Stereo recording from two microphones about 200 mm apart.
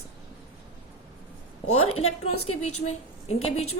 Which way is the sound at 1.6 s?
90° left.